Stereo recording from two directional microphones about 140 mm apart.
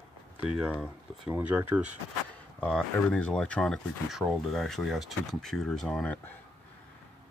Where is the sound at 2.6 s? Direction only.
5° left (ahead or behind).